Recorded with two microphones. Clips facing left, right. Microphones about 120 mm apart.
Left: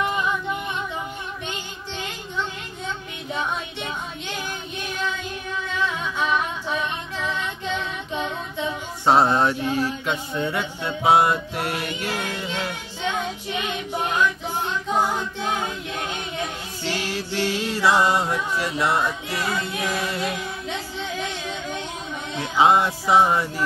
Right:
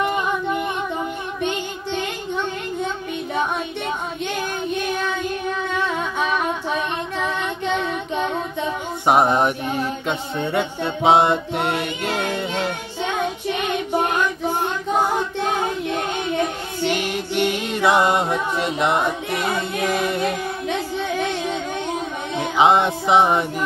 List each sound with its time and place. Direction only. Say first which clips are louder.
5.9 s humming: right 2 dB; 55° right (ahead or behind)
9.0 s music: right 1 dB; 15° right (ahead or behind)
12.2 s child singing: right 5 dB; 60° right (ahead or behind)
16.8 s music: right 5 dB; 20° right (ahead or behind)
19.5 s child singing: right 4 dB; 55° right (ahead or behind)
20.2 s music: right 5 dB; 55° right (ahead or behind)
22.4 s music: right 2 dB; 20° right (ahead or behind)